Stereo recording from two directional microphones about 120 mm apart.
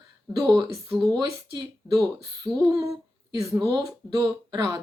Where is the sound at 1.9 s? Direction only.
30° right (ahead or behind).